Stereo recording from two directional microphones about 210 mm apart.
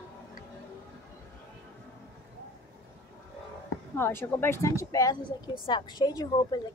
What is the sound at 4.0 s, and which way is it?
A woman's voice, 10° left (ahead or behind).